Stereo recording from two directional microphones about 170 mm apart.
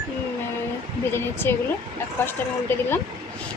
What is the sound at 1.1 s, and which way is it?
Speech, 15° left (ahead or behind).